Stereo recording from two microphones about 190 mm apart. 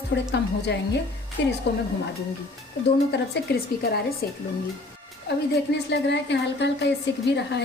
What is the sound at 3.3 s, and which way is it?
Speech, 60° left (ahead or behind).